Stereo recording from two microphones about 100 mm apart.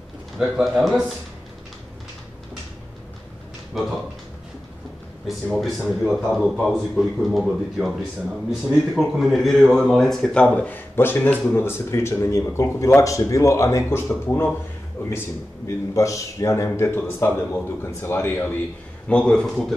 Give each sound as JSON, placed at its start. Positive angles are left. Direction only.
{"t": 0.4, "sound": "a man's voice", "side_deg": -5}
{"t": 3.8, "sound": "a man's voice", "side_deg": 0}
{"t": 5.2, "sound": "a man's voice", "side_deg": 0}
{"t": 19.0, "sound": "speech", "side_deg": 10}